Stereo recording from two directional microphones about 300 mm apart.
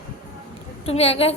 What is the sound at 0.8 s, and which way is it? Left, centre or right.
Speech, centre.